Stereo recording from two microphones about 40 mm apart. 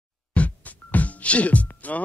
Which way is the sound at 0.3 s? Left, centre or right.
Left.